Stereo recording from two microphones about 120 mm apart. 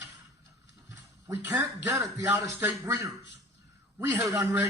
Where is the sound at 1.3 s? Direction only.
20° right (ahead or behind).